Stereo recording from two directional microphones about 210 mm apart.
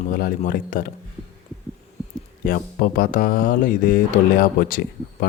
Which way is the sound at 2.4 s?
40° left (ahead or behind).